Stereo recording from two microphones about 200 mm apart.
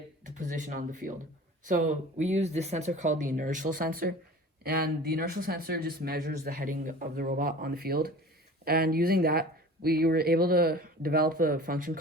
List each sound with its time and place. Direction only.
0.3 s speech: 40° right (ahead or behind)